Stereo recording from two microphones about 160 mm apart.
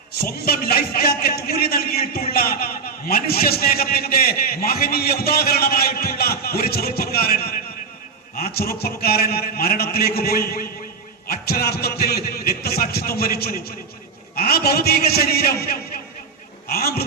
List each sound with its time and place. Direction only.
0.3 s a man's voice: 75° left (ahead or behind)